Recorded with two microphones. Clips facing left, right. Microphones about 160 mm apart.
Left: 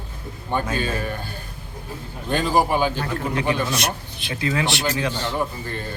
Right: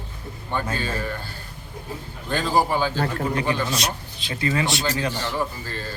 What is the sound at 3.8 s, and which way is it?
Speech, 55° left (ahead or behind).